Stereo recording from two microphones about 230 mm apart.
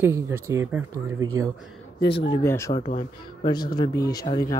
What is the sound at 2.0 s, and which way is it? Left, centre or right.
Speech, left.